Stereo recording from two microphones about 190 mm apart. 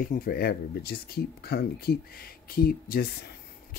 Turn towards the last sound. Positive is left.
turn(degrees=50)  # may be behind; listen again after turning